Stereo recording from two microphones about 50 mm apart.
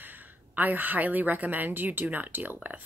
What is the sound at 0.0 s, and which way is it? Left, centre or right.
A woman's voice, right.